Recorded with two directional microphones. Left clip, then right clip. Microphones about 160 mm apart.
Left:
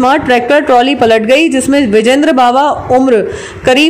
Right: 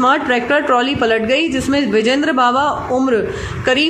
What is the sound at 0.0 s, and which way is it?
Speech, 35° left (ahead or behind).